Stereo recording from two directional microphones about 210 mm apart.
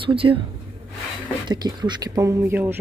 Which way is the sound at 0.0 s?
25° right (ahead or behind).